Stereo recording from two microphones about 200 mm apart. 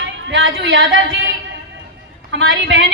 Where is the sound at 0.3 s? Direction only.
70° right (ahead or behind).